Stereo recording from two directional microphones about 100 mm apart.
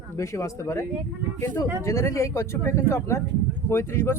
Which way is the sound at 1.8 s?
30° left (ahead or behind).